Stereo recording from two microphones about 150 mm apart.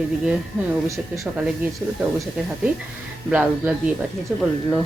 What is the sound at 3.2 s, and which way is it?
Speech, 5° right (ahead or behind).